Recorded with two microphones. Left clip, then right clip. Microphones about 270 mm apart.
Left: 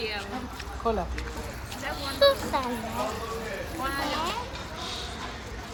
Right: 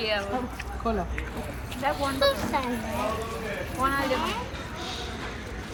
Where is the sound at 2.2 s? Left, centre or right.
Centre.